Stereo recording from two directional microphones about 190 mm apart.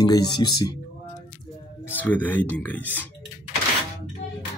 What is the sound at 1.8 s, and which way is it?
Speech, 10° left (ahead or behind).